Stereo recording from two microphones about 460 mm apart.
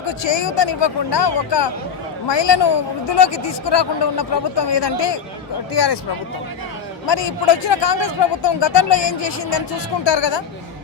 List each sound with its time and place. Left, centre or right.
0.2 s speech: left
7.1 s speech: left